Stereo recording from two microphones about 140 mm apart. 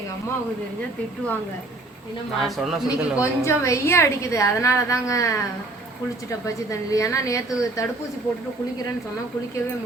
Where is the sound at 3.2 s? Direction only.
20° left (ahead or behind).